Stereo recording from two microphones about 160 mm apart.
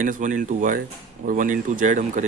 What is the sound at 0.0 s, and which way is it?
Speech, 55° right (ahead or behind).